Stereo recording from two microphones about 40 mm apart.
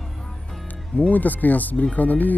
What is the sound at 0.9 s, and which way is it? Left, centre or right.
Speech, left.